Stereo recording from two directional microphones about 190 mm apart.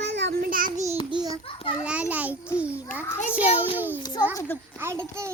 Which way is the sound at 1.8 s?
5° right (ahead or behind).